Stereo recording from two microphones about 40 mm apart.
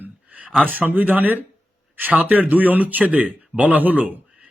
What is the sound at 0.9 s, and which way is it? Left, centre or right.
A man's voice, right.